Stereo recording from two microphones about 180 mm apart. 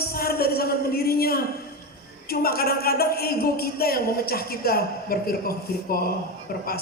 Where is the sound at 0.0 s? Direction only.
60° left (ahead or behind).